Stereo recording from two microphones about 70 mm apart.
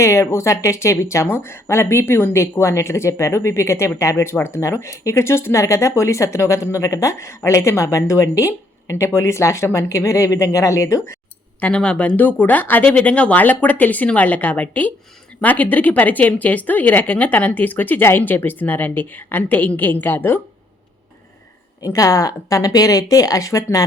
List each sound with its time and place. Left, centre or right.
0.0 s speech: left
11.6 s speech: centre; by 20.4 s left
21.8 s a woman's voice: left